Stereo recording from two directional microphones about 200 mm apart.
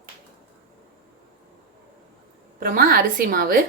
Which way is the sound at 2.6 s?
45° right (ahead or behind).